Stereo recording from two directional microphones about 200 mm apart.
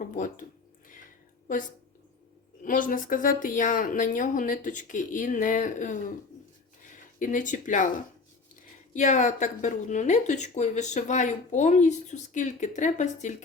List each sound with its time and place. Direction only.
0.0 s speech: 40° left (ahead or behind)
2.6 s speech: 40° left (ahead or behind)
8.9 s speech: 40° left (ahead or behind)